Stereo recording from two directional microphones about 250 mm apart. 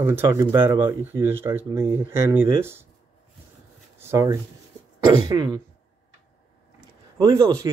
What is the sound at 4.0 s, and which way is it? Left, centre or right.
Speech, centre.